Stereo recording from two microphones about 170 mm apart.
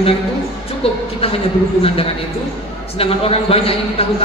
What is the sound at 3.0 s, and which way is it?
A man's voice, 35° left (ahead or behind).